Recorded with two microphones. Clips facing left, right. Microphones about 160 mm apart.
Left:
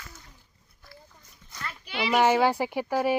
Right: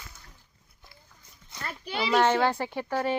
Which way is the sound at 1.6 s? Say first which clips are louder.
Right 3 dB; 40° right (ahead or behind).